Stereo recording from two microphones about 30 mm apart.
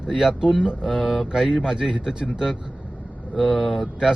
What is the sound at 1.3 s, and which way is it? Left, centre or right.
Speech, right.